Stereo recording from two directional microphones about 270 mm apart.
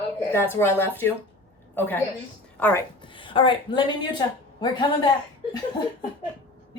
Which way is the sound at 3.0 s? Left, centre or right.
Centre.